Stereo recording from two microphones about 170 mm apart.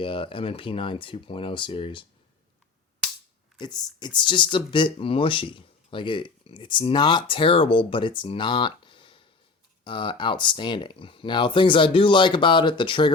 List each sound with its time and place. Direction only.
0.0 s speech: 30° left (ahead or behind)
3.6 s speech: 25° left (ahead or behind)